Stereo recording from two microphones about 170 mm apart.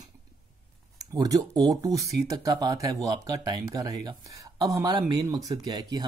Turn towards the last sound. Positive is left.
turn(degrees=-25)  # may be behind; listen again after turning